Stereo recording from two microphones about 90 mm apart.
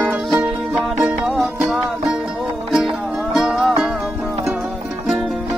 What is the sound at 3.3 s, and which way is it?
Music, 5° right (ahead or behind).